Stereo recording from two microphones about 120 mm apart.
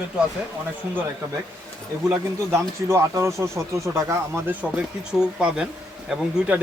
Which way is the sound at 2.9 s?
25° right (ahead or behind).